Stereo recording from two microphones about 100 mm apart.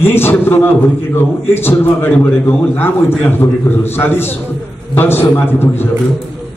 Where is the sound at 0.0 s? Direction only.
20° left (ahead or behind).